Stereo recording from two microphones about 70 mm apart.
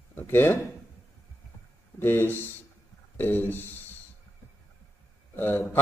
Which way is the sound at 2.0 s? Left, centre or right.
Left.